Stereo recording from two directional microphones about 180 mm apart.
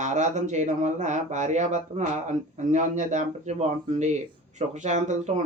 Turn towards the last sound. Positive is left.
turn(degrees=-40)  # may be behind; listen again after turning